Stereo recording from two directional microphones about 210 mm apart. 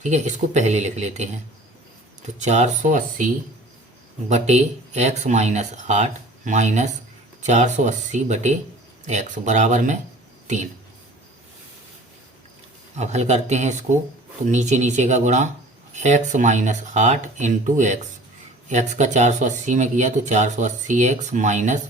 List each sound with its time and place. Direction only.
0.0 s speech: 35° right (ahead or behind)
4.3 s speech: 30° right (ahead or behind)
13.0 s speech: 30° right (ahead or behind)